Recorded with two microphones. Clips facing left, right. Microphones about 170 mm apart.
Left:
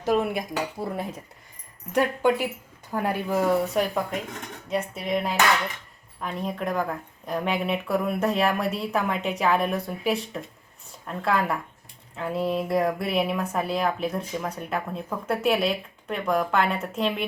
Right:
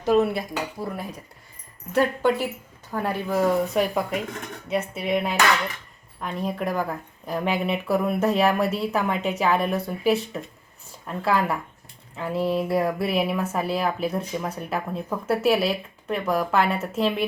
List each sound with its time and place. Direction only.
0.0 s speech: 10° left (ahead or behind)
0.8 s dishes: 25° left (ahead or behind)
1.9 s speech: 15° left (ahead or behind)
3.8 s speech: 10° right (ahead or behind)